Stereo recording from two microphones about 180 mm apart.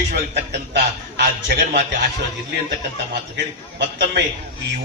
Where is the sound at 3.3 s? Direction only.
70° right (ahead or behind).